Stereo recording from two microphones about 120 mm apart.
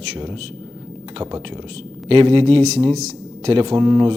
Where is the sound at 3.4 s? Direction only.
50° right (ahead or behind).